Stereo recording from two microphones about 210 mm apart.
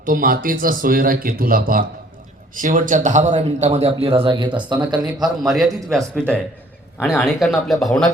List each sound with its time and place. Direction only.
0.0 s a man's voice: 40° right (ahead or behind); by 8.1 s centre (ahead or behind)